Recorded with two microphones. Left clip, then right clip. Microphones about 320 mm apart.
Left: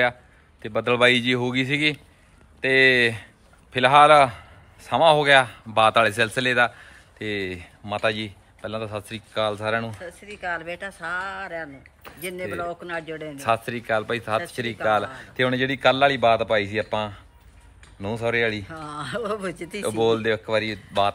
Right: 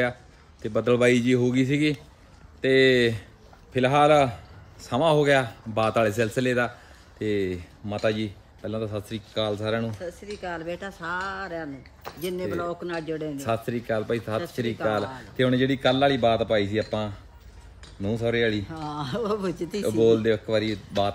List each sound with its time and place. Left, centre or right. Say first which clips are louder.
0.6 s speech: left 2 dB; centre
13.4 s speech: left 9 dB; centre
18.9 s speech: even; centre
19.8 s speech: right 1 dB; centre
20.1 s speech: even; centre